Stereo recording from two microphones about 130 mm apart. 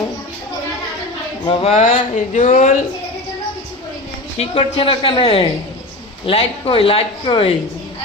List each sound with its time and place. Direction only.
1.5 s speech: 55° left (ahead or behind); by 2.8 s 70° left (ahead or behind)
4.4 s speech: 45° left (ahead or behind)